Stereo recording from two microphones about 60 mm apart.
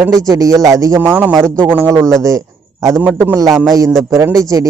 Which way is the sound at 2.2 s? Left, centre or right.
Right.